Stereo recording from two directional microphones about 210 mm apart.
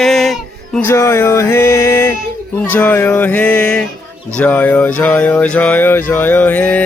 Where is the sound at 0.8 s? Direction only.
10° left (ahead or behind).